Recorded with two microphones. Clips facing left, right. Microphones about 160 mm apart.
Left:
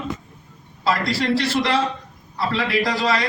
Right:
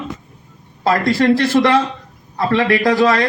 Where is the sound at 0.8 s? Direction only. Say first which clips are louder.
Right 7 dB; 50° right (ahead or behind).